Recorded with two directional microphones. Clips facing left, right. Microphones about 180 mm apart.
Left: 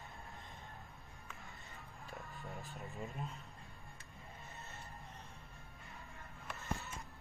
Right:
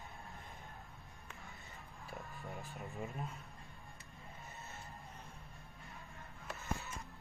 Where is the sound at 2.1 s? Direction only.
Centre (ahead or behind).